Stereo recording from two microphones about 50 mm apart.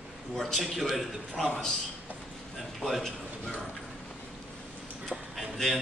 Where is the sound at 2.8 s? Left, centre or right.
Centre.